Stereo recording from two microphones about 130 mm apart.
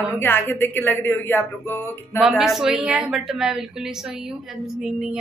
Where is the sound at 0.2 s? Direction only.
15° left (ahead or behind).